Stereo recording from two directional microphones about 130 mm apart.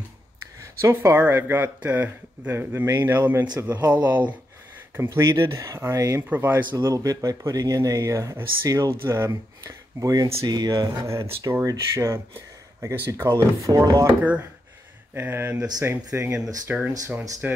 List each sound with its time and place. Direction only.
0.6 s speech: 20° right (ahead or behind)
11.1 s speech: 20° right (ahead or behind)
15.1 s speech: 15° right (ahead or behind)